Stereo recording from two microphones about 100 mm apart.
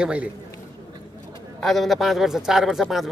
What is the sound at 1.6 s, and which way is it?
A man's voice, centre (ahead or behind).